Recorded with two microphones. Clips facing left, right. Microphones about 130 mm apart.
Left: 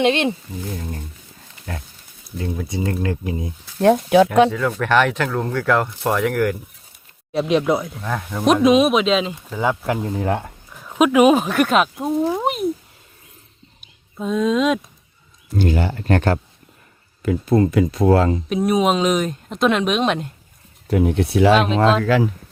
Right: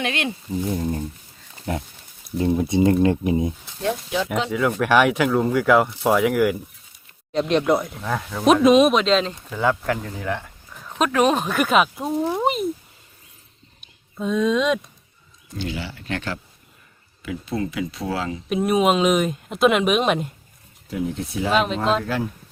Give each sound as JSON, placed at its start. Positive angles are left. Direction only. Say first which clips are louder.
{"t": 0.0, "sound": "speech", "louder": "left 8 dB", "side_deg": 25}
{"t": 0.7, "sound": "speech", "louder": "right 6 dB", "side_deg": -20}
{"t": 3.8, "sound": "speech", "louder": "left 11 dB", "side_deg": 60}
{"t": 4.5, "sound": "speech", "louder": "even", "side_deg": -10}
{"t": 9.8, "sound": "speech", "louder": "left 4 dB", "side_deg": 20}
{"t": 10.7, "sound": "speech", "louder": "left 6 dB", "side_deg": 5}
{"t": 13.8, "sound": "speech", "louder": "left 1 dB", "side_deg": 0}
{"t": 15.5, "sound": "speech", "louder": "left 9 dB", "side_deg": 50}
{"t": 18.4, "sound": "speech", "louder": "left 1 dB", "side_deg": 0}
{"t": 20.8, "sound": "speech", "louder": "left 8 dB", "side_deg": 65}
{"t": 21.5, "sound": "speech", "louder": "even", "side_deg": 0}
{"t": 22.0, "sound": "speech", "louder": "left 8 dB", "side_deg": 90}